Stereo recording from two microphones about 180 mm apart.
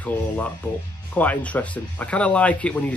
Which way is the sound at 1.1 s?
10° left (ahead or behind).